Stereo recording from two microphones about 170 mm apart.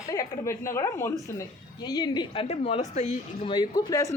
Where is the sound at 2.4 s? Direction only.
35° left (ahead or behind).